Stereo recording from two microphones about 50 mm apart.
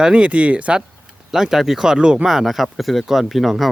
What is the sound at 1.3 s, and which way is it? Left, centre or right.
Speech, centre.